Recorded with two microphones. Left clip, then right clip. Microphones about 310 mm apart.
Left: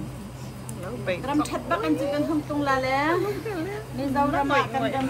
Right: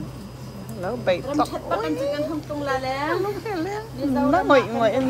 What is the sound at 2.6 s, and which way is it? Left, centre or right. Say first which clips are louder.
Speech: left 1 dB; left.